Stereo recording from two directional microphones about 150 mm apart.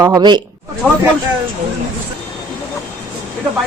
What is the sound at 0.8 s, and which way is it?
Speech, 10° left (ahead or behind).